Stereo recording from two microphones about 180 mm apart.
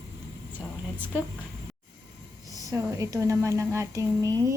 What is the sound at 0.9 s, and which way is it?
Speech, 10° right (ahead or behind).